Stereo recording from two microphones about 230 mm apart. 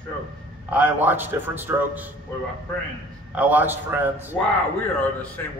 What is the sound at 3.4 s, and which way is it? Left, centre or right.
Speech, centre.